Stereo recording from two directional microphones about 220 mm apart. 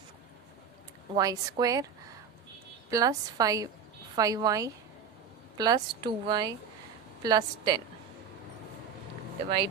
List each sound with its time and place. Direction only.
1.1 s a woman's voice: 15° right (ahead or behind)
2.9 s a woman's voice: 15° right (ahead or behind)